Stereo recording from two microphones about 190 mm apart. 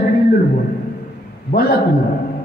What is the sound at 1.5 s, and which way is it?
Speech, 55° left (ahead or behind).